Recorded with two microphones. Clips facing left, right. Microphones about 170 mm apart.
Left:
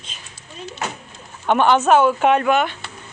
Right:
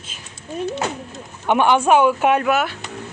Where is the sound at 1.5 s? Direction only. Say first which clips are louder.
Even; 10° right (ahead or behind).